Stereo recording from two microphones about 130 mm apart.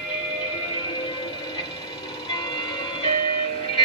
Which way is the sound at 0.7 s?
35° left (ahead or behind).